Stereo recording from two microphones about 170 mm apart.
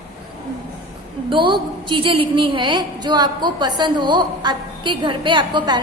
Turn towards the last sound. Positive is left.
turn(degrees=-30)  # may be behind; listen again after turning